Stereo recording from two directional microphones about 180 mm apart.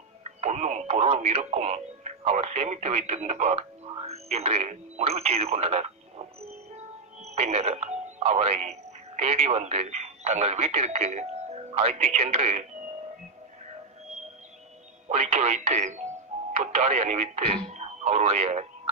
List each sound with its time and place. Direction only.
0.2 s speech: 40° right (ahead or behind)
7.2 s speech: 35° right (ahead or behind)
15.0 s speech: 40° right (ahead or behind)